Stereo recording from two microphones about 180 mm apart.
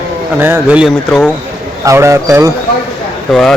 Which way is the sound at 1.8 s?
15° right (ahead or behind).